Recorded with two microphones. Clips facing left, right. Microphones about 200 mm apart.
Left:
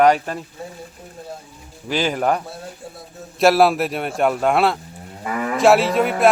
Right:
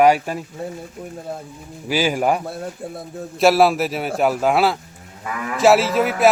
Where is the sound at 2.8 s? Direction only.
55° right (ahead or behind).